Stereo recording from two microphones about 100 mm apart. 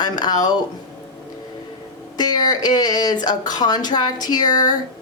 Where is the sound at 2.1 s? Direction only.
45° left (ahead or behind).